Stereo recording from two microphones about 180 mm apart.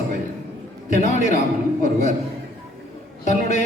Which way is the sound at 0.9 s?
40° left (ahead or behind).